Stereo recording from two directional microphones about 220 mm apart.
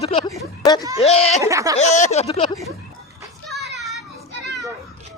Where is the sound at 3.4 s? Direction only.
Centre (ahead or behind).